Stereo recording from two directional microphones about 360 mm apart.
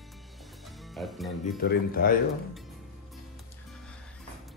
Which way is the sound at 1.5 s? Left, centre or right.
Left.